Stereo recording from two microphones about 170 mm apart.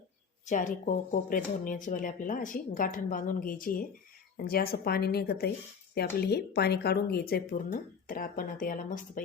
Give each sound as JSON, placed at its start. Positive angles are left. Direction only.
{"t": 0.4, "sound": "speech", "side_deg": 45}